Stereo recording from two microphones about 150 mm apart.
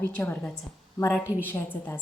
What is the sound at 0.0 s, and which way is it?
A woman's voice, 15° left (ahead or behind).